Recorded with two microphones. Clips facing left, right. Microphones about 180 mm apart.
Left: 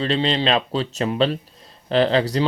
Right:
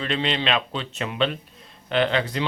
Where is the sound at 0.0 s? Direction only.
35° left (ahead or behind).